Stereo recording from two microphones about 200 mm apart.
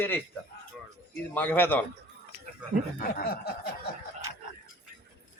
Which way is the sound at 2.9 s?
50° left (ahead or behind).